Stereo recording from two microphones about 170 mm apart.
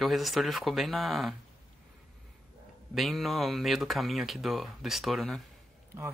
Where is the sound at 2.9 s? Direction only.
Centre (ahead or behind).